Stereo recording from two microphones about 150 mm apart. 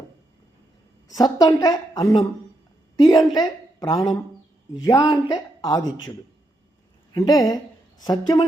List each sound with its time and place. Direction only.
1.0 s a woman's voice: 25° left (ahead or behind)